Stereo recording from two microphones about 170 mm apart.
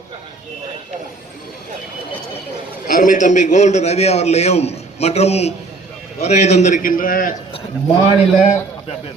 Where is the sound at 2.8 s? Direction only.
55° left (ahead or behind).